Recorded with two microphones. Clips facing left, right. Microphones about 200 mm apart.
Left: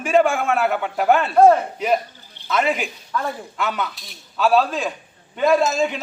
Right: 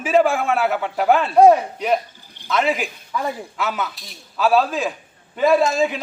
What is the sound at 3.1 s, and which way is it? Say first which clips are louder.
A man's voice: right 1 dB; 10° right (ahead or behind).